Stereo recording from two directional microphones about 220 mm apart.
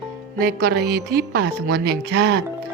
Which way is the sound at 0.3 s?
40° right (ahead or behind).